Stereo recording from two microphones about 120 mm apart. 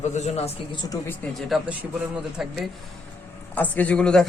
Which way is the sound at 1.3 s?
Centre (ahead or behind).